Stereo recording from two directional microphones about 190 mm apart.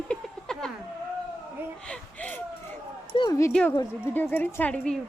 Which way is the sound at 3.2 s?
15° left (ahead or behind).